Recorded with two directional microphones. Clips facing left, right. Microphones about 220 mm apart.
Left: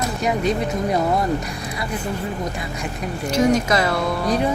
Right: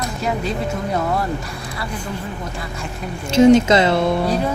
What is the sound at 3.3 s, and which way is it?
Speech, 25° right (ahead or behind).